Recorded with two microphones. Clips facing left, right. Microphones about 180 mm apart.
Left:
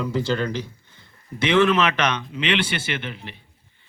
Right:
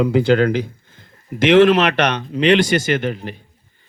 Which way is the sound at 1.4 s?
90° right.